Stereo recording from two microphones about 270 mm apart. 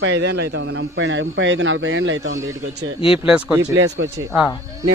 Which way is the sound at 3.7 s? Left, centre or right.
Right.